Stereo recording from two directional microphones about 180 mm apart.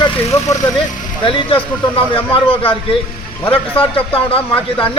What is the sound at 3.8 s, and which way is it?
Speech, 30° left (ahead or behind).